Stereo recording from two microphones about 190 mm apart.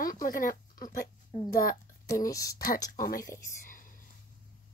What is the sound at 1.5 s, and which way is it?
Speech, 50° left (ahead or behind).